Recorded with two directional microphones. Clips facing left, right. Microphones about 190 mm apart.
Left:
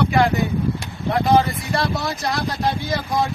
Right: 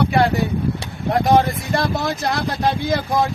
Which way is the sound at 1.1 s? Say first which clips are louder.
Right 1 dB; 45° right (ahead or behind).